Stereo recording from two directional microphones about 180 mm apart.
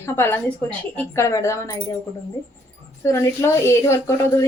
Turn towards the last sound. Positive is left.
turn(degrees=15)  # may be behind; listen again after turning